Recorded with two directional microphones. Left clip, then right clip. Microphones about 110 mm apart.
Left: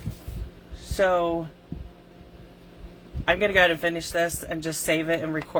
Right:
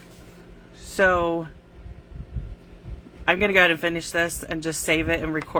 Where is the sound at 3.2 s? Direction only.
50° right (ahead or behind).